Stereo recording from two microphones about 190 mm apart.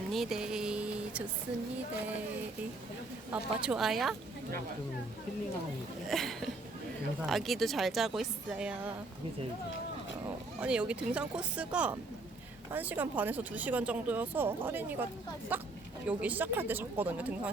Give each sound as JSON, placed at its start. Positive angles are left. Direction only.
{"t": 0.1, "sound": "a sound", "side_deg": 0}
{"t": 3.6, "sound": "speech", "side_deg": -5}
{"t": 6.1, "sound": "speech", "side_deg": 0}
{"t": 10.6, "sound": "speech", "side_deg": -5}